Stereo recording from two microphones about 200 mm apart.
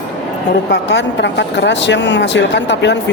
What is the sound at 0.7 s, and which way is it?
Speech, 60° left (ahead or behind).